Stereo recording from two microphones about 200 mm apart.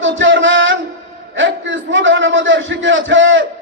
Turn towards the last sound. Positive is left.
turn(degrees=-70)  # may be behind; listen again after turning